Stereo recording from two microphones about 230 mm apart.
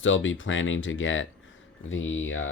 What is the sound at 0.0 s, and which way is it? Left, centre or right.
Speech, left.